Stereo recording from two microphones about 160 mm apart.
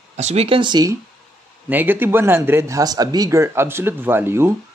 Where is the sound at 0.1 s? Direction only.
45° right (ahead or behind); by 0.9 s 25° right (ahead or behind).